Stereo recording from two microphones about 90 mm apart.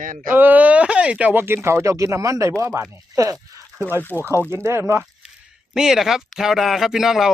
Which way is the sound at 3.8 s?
25° right (ahead or behind).